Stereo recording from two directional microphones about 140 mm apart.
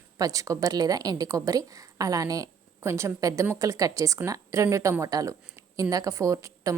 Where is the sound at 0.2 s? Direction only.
25° right (ahead or behind).